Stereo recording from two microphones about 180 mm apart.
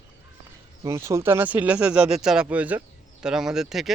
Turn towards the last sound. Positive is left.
turn(degrees=0)  # may be behind; listen again after turning